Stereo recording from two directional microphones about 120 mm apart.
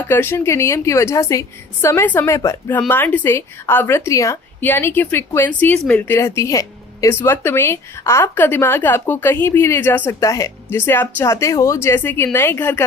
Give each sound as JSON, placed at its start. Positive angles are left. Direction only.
{"t": 0.1, "sound": "a woman's voice", "side_deg": 20}
{"t": 10.2, "sound": "a woman's voice", "side_deg": 25}